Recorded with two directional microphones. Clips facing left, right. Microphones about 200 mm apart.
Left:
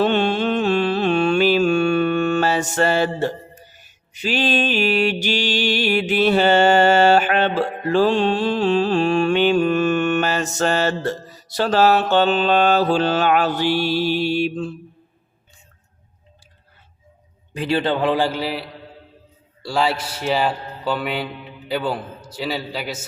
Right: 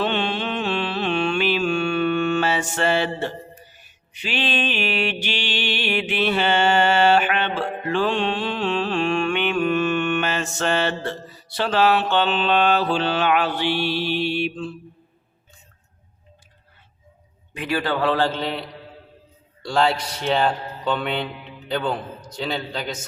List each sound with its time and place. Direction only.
0.0 s mantra: 45° left (ahead or behind)
17.5 s a man's voice: 30° left (ahead or behind); by 23.0 s 5° left (ahead or behind)